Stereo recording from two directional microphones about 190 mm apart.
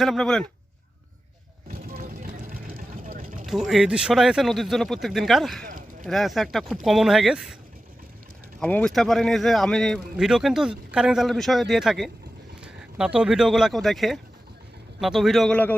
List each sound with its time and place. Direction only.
0.0 s speech: centre (ahead or behind)
1.6 s vehicle: 45° right (ahead or behind)
3.4 s speech: centre (ahead or behind)
5.6 s a sound: 45° right (ahead or behind)
6.1 s speech: centre (ahead or behind)
8.6 s speech: 5° left (ahead or behind)